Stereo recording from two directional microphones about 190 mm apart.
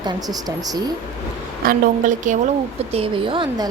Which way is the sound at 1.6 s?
45° right (ahead or behind).